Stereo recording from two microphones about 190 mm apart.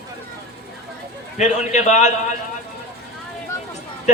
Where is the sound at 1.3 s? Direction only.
40° left (ahead or behind).